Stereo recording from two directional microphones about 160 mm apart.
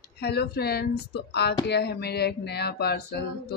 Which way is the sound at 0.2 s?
90° left.